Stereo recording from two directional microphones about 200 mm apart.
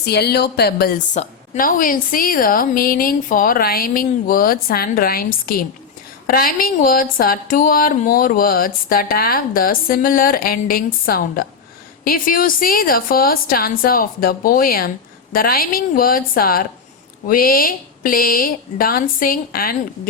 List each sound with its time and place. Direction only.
0.0 s a woman's voice: 55° left (ahead or behind)